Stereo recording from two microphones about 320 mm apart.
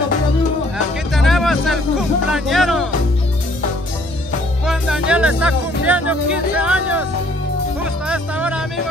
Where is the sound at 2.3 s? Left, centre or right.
Centre.